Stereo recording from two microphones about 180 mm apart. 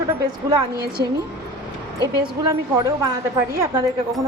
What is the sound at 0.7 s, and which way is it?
Speech, 60° right (ahead or behind).